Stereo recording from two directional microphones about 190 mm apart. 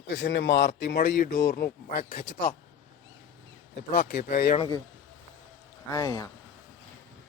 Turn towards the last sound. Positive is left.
turn(degrees=20)  # may be behind; listen again after turning